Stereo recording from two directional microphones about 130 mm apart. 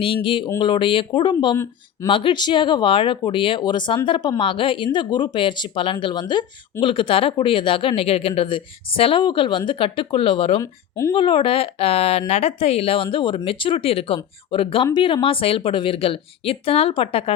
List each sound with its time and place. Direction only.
0.0 s speech: 40° left (ahead or behind)
10.6 s speech: 25° left (ahead or behind)
11.1 s a woman's voice: 40° left (ahead or behind)